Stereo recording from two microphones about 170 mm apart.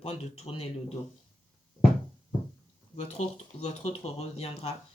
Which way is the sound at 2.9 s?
40° left (ahead or behind).